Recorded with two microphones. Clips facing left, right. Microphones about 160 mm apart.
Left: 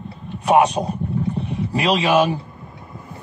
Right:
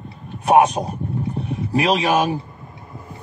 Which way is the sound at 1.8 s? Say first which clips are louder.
Left 1 dB; 45° right (ahead or behind).